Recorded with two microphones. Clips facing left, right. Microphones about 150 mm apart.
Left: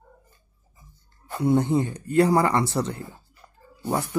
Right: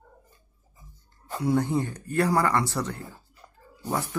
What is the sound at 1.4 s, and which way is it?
Speech, 20° left (ahead or behind).